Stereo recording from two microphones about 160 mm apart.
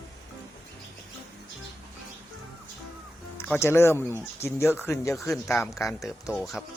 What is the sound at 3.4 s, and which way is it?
Speech, 15° left (ahead or behind).